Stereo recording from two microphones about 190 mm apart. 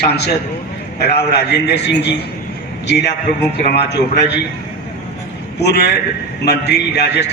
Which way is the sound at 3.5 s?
60° left (ahead or behind).